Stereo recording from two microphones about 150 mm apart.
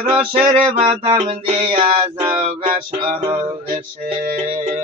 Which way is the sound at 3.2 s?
25° right (ahead or behind).